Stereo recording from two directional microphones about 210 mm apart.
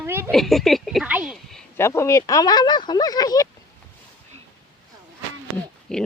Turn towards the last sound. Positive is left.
turn(degrees=5)  # may be behind; listen again after turning